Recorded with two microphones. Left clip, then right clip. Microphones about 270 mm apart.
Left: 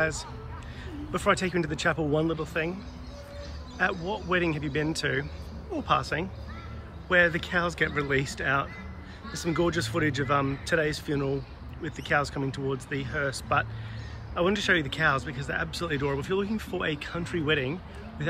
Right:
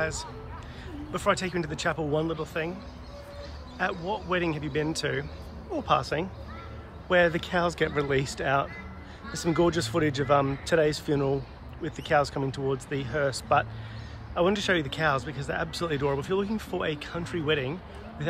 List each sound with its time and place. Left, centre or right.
0.0 s speech: centre
3.9 s speech: right
4.3 s speech: centre